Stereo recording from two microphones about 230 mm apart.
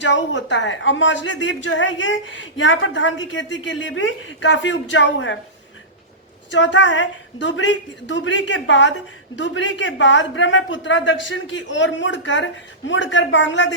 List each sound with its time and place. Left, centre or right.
0.0 s speech: left
6.5 s speech: left